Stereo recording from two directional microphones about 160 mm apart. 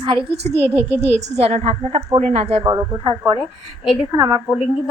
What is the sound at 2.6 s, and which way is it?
Speech, 20° right (ahead or behind).